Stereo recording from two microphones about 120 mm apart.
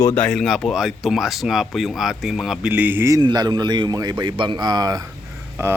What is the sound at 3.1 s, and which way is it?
A man's voice, 35° right (ahead or behind).